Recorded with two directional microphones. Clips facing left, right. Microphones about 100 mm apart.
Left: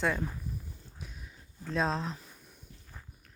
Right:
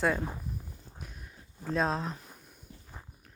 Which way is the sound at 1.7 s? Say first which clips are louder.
Right 1 dB; 5° right (ahead or behind).